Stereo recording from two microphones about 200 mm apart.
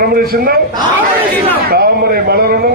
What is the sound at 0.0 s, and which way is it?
Speech, 50° right (ahead or behind).